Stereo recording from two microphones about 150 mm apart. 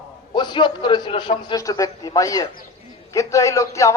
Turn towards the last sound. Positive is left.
turn(degrees=20)  # may be behind; listen again after turning